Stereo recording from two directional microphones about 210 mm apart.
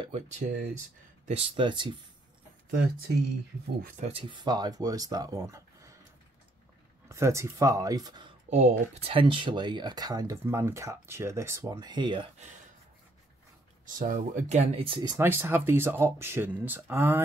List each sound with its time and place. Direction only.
0.4 s speech: 35° right (ahead or behind)
3.9 s speech: 30° right (ahead or behind)
7.1 s speech: 15° right (ahead or behind)
8.5 s speech: 30° right (ahead or behind)
13.8 s speech: 40° right (ahead or behind)
15.1 s speech: 10° right (ahead or behind)